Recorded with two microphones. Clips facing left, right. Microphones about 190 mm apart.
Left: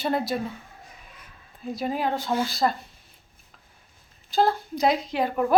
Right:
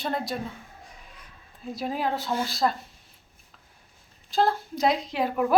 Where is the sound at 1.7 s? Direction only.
Centre (ahead or behind).